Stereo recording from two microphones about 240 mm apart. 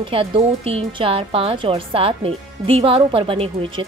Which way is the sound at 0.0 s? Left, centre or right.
Right.